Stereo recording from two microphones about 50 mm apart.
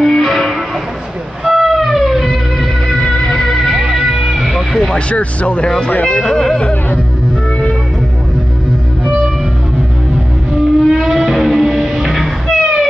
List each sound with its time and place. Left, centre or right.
0.0 s music: centre
3.8 s music: centre
4.8 s speech: left
6.0 s speech: centre
10.5 s music: centre
12.5 s music: centre